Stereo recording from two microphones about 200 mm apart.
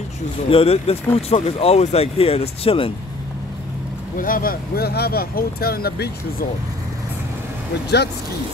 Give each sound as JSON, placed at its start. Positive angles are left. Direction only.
{"t": 0.5, "sound": "speech", "side_deg": 30}
{"t": 4.2, "sound": "speech", "side_deg": 45}